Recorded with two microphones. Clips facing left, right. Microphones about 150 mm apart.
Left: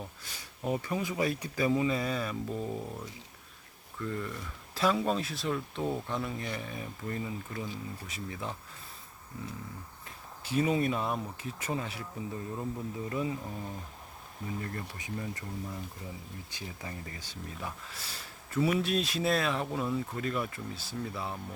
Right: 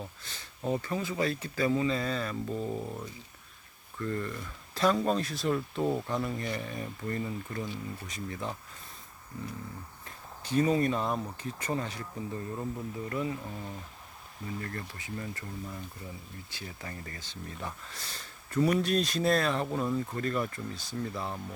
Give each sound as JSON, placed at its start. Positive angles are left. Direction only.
{"t": 0.0, "sound": "speech", "side_deg": 10}
{"t": 10.4, "sound": "speech", "side_deg": 5}
{"t": 13.1, "sound": "speech", "side_deg": 15}
{"t": 13.4, "sound": "speech", "side_deg": 5}
{"t": 16.5, "sound": "speech", "side_deg": 15}